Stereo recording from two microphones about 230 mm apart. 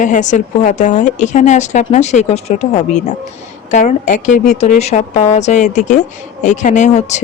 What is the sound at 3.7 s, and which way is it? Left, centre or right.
A woman's voice, left.